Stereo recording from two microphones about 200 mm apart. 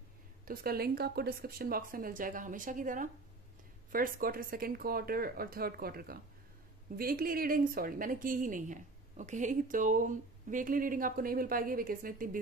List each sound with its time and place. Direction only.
0.5 s a woman's voice: 50° right (ahead or behind)